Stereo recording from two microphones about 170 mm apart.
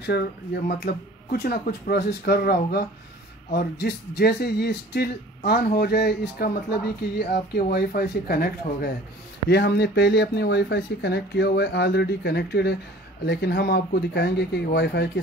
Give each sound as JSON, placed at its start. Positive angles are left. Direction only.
{"t": 0.7, "sound": "speech", "side_deg": 65}
{"t": 9.5, "sound": "speech", "side_deg": 80}
{"t": 13.2, "sound": "speech", "side_deg": 85}